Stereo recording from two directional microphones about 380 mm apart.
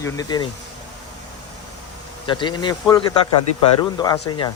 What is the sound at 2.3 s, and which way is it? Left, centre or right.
Speech, centre.